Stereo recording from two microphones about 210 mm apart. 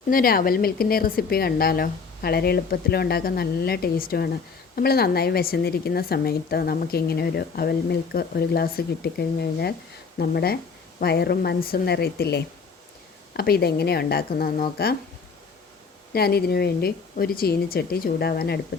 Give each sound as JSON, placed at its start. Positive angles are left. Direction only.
{"t": 0.1, "sound": "speech", "side_deg": 45}
{"t": 16.1, "sound": "speech", "side_deg": 50}